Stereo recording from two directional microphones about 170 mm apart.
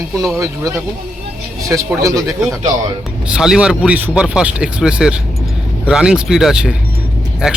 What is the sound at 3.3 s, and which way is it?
Speech, 5° right (ahead or behind).